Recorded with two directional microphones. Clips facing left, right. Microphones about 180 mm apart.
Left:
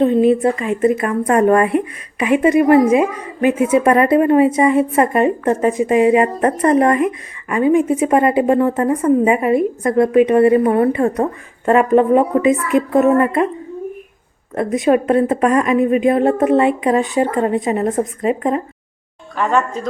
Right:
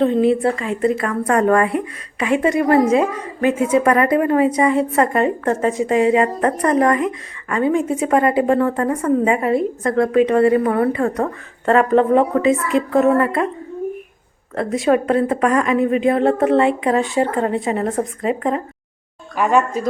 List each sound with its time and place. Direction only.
0.0 s a woman's voice: 15° left (ahead or behind)
14.5 s a woman's voice: 20° left (ahead or behind)
19.4 s a woman's voice: 10° right (ahead or behind)